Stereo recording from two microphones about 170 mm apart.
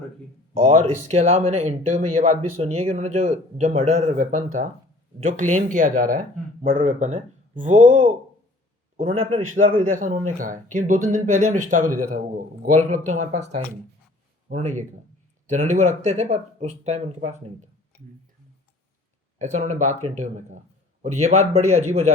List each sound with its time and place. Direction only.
0.5 s speech: 50° right (ahead or behind)
9.6 s speech: 55° right (ahead or behind)
19.4 s speech: 45° right (ahead or behind)